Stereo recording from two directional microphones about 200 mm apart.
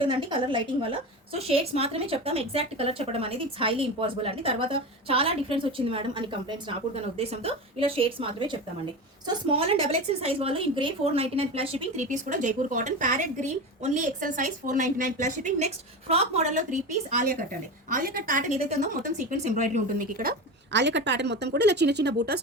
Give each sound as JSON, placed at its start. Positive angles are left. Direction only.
{"t": 0.0, "sound": "a woman's voice", "side_deg": -25}
{"t": 20.7, "sound": "speech", "side_deg": -60}